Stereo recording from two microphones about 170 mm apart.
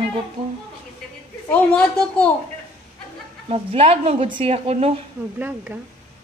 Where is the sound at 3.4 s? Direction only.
35° right (ahead or behind).